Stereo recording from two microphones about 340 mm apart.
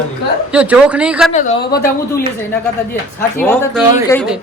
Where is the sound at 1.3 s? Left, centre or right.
Left.